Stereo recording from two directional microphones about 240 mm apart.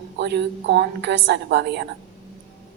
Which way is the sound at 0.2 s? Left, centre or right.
Right.